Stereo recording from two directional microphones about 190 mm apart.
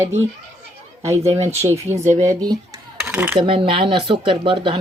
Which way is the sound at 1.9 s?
35° right (ahead or behind).